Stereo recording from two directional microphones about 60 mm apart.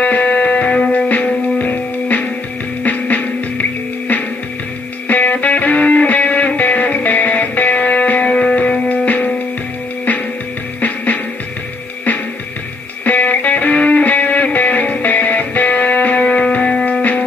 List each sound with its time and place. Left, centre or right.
0.0 s music: left
5.0 s music: left
13.0 s music: left